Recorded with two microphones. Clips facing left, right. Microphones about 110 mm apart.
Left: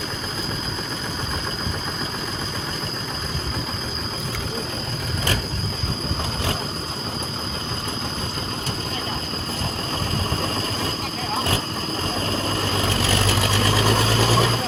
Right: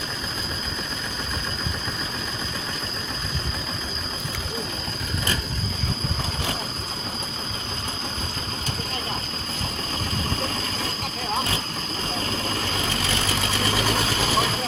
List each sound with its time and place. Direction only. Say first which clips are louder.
13.3 s ratchet: left 4 dB; 35° left (ahead or behind)